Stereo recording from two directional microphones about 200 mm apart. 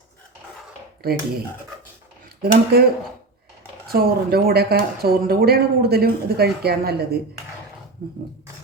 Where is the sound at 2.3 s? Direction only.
50° right (ahead or behind).